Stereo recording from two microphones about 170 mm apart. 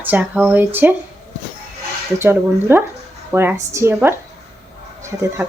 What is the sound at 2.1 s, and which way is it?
Speech, 15° right (ahead or behind).